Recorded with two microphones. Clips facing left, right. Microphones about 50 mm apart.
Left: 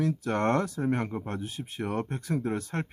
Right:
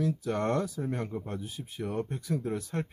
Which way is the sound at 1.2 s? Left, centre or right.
Left.